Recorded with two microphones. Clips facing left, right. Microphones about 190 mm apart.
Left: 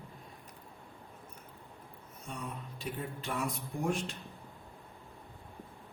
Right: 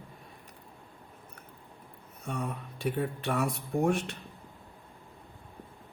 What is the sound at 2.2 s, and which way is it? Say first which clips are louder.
Speech: right 7 dB; 60° right (ahead or behind).